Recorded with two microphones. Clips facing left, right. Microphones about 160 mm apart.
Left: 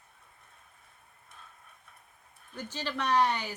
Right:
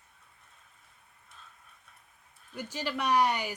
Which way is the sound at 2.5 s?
10° right (ahead or behind).